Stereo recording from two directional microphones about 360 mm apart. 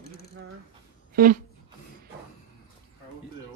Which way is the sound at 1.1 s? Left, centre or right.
Right.